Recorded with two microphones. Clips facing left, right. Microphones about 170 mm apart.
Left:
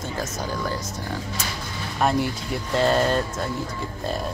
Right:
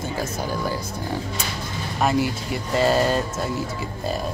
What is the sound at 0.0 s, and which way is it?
Speech, 10° right (ahead or behind).